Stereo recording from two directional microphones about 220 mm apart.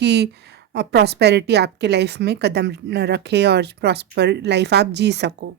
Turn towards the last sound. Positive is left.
turn(degrees=-50)  # may be behind; listen again after turning